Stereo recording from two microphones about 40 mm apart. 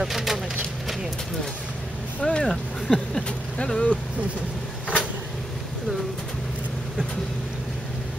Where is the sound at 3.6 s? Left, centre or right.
Left.